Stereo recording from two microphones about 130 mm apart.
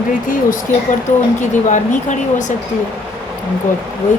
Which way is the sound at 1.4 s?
70° left (ahead or behind).